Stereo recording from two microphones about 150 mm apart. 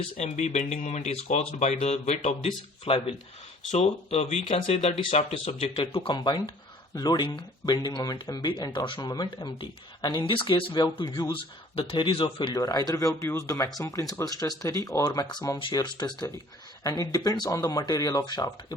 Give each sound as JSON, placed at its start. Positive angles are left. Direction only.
{"t": 0.2, "sound": "speech", "side_deg": 50}